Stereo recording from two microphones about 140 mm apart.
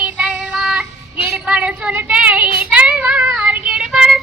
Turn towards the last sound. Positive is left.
turn(degrees=-5)  # may be behind; listen again after turning